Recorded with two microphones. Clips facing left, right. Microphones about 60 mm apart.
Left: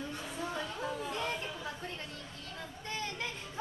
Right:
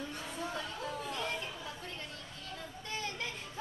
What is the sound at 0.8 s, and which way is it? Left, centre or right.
Chatter, left.